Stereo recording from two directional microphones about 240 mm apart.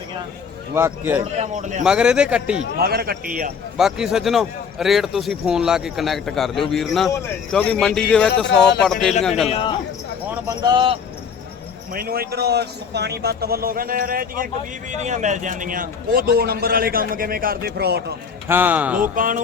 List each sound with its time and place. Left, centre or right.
0.7 s a man's voice: centre
1.2 s a man's voice: right
1.8 s speech: centre
2.7 s a man's voice: right
3.8 s speech: centre
9.5 s speech: left
10.6 s a man's voice: centre
11.9 s a man's voice: right
18.4 s a man's voice: centre
19.1 s a man's voice: right